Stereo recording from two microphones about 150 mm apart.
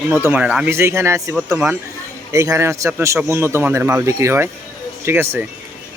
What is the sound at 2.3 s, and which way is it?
A man's voice, 20° right (ahead or behind).